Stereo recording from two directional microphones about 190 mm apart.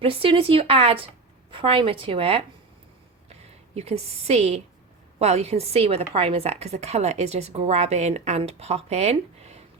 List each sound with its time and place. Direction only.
0.0 s a woman's voice: 30° right (ahead or behind)